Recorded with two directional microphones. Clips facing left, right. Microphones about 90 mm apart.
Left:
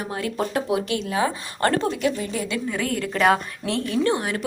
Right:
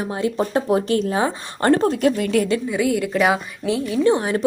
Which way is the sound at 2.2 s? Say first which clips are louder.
Right 8 dB; 65° right (ahead or behind).